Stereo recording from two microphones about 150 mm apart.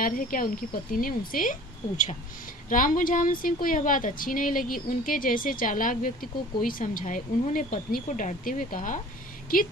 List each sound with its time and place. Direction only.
0.0 s speech: 70° left (ahead or behind)